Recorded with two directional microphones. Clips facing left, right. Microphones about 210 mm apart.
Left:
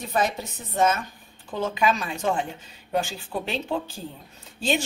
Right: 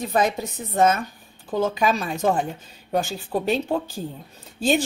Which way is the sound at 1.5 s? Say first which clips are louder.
Right 3 dB; 40° right (ahead or behind).